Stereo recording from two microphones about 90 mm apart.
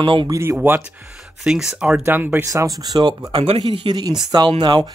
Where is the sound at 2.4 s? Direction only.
40° right (ahead or behind).